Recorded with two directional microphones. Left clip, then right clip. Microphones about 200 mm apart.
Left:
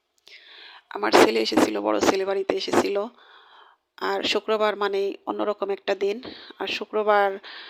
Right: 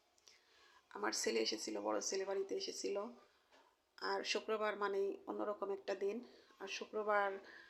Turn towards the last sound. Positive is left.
turn(degrees=50)  # may be behind; listen again after turning